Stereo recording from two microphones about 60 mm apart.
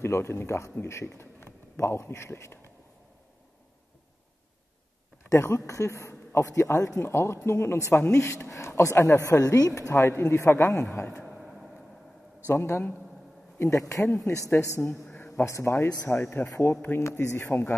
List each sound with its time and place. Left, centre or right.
0.0 s a man's voice: left
5.3 s a man's voice: left
7.0 s a man's voice: left
9.2 s a man's voice: left
11.2 s a sound: centre
12.4 s a man's voice: left
13.6 s a man's voice: left
14.6 s a man's voice: left
15.0 s a sound: left
15.4 s a man's voice: left
16.1 s a man's voice: left